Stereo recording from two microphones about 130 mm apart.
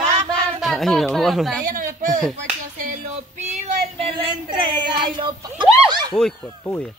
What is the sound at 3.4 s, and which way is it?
Child singing, 55° right (ahead or behind).